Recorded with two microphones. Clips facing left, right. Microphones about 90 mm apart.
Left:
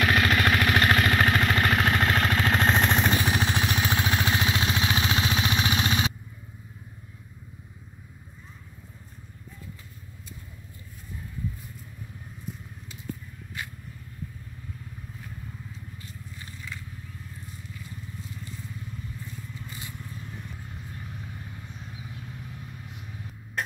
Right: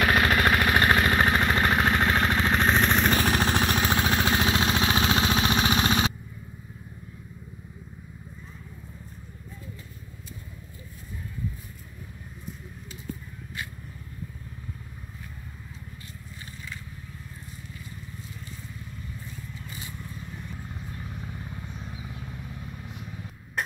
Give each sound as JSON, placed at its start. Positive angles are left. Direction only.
{"t": 0.0, "sound": "vehicle", "side_deg": -25}
{"t": 2.8, "sound": "vehicle", "side_deg": 15}
{"t": 3.2, "sound": "vehicle", "side_deg": -45}